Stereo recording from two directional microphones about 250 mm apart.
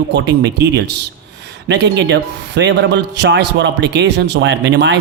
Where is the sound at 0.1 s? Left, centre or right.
Right.